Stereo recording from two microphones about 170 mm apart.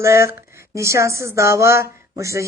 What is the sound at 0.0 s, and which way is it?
Speech, 15° right (ahead or behind).